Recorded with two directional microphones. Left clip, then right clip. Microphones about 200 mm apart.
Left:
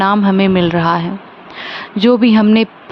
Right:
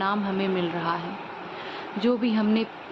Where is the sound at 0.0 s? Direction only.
50° left (ahead or behind).